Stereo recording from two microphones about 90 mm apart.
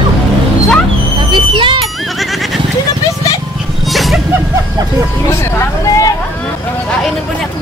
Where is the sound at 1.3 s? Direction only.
65° right (ahead or behind).